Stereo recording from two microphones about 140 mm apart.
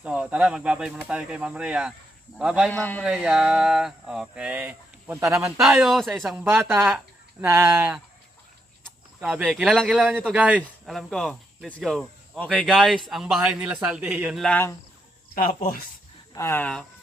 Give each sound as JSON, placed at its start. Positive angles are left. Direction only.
{"t": 0.0, "sound": "speech", "side_deg": -10}
{"t": 2.6, "sound": "speech", "side_deg": 10}
{"t": 3.0, "sound": "speech", "side_deg": -5}
{"t": 6.4, "sound": "speech", "side_deg": -15}
{"t": 9.2, "sound": "speech", "side_deg": -5}
{"t": 10.8, "sound": "speech", "side_deg": 0}
{"t": 14.3, "sound": "speech", "side_deg": 5}
{"t": 16.3, "sound": "speech", "side_deg": 20}